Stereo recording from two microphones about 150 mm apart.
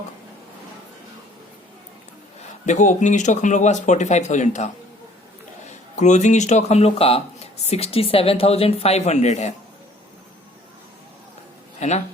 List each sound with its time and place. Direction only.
2.6 s speech: 55° left (ahead or behind)
6.0 s speech: 50° left (ahead or behind)
11.8 s speech: 50° left (ahead or behind)